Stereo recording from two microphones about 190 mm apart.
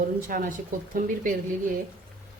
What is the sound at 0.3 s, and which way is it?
A woman's voice, 45° right (ahead or behind).